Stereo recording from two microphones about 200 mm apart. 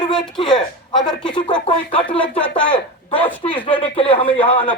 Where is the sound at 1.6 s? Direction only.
25° left (ahead or behind).